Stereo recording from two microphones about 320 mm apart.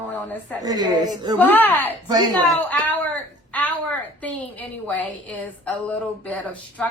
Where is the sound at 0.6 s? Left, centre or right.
Centre.